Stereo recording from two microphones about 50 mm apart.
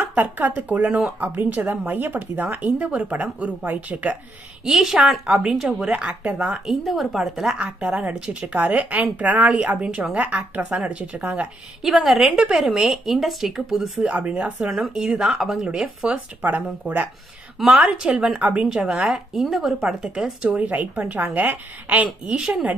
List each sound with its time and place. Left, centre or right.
0.0 s speech: right
2.5 s speech: right
4.6 s a woman's voice: centre
6.7 s a woman's voice: centre
7.5 s speech: centre
8.7 s speech: right
11.8 s a woman's voice: centre
14.0 s a woman's voice: right
16.3 s speech: right
17.7 s a woman's voice: right
19.0 s a woman's voice: centre
20.4 s speech: right